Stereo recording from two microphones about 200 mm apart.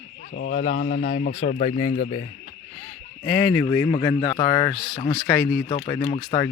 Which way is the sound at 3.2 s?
20° left (ahead or behind).